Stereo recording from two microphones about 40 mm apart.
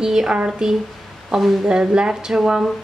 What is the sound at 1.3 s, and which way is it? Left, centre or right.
Speech, centre.